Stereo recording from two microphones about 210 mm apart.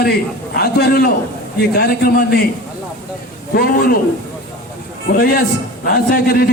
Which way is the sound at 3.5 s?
45° left (ahead or behind).